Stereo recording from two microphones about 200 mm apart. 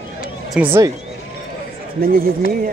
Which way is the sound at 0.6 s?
10° right (ahead or behind).